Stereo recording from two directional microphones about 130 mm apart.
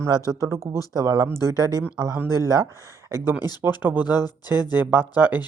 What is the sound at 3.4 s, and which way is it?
Speech, 30° left (ahead or behind).